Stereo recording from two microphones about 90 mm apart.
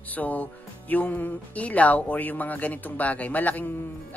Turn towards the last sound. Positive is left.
turn(degrees=20)  # may be behind; listen again after turning